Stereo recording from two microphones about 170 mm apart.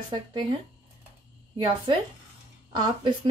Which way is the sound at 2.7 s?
25° right (ahead or behind).